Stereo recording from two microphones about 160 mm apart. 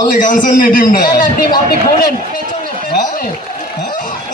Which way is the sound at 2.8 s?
60° left (ahead or behind).